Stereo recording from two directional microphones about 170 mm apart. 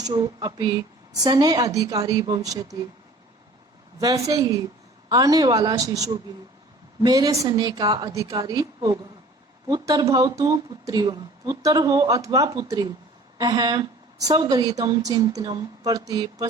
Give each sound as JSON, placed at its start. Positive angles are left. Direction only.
{"t": 0.0, "sound": "speech", "side_deg": -25}
{"t": 4.0, "sound": "speech", "side_deg": -20}